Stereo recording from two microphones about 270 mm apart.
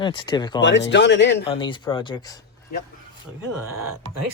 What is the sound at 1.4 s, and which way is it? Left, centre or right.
Speech, centre.